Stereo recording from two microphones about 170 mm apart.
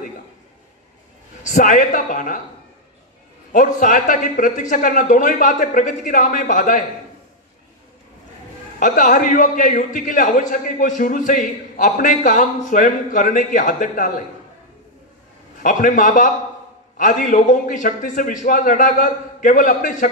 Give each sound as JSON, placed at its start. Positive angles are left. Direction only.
{"t": 1.4, "sound": "a man's voice", "side_deg": 50}
{"t": 3.5, "sound": "a man's voice", "side_deg": 50}
{"t": 8.7, "sound": "a man's voice", "side_deg": 50}
{"t": 15.6, "sound": "a man's voice", "side_deg": 50}